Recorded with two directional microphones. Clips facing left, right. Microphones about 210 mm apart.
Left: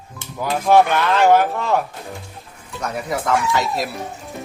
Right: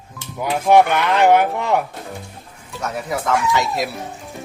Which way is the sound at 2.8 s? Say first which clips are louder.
Even; centre (ahead or behind).